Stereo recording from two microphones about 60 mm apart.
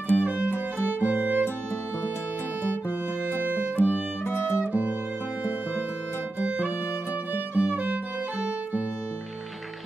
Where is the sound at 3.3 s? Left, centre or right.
Right.